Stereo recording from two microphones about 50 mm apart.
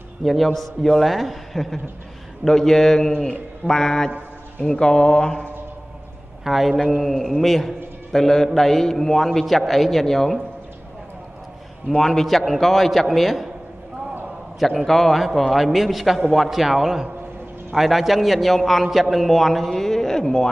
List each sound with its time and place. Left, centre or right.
0.2 s a man's voice: centre
6.4 s a man's voice: centre
12.0 s a man's voice: centre
14.6 s a man's voice: centre